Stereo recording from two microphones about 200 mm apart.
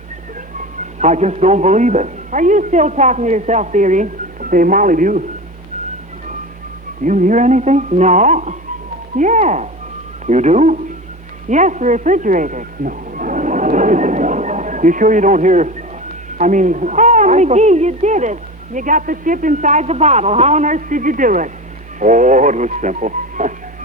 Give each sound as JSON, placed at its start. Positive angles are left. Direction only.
{"t": 0.9, "sound": "speech", "side_deg": -35}
{"t": 7.0, "sound": "speech", "side_deg": -40}